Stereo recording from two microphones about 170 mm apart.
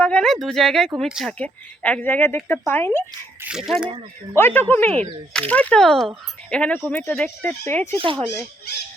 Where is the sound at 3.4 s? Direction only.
5° right (ahead or behind).